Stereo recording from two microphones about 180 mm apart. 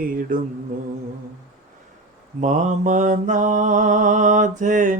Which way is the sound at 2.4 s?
45° right (ahead or behind).